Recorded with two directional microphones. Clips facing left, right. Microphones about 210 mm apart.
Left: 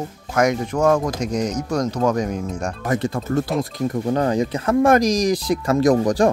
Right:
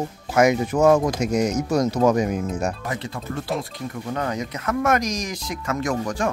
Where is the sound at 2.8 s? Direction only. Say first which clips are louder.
Left 8 dB; 45° left (ahead or behind).